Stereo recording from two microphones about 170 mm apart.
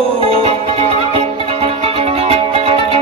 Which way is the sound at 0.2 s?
35° right (ahead or behind).